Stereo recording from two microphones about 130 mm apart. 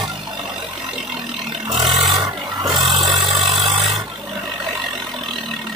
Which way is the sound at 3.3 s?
Centre (ahead or behind).